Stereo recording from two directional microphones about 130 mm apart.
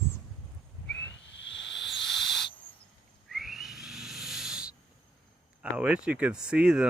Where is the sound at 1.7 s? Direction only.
Centre (ahead or behind).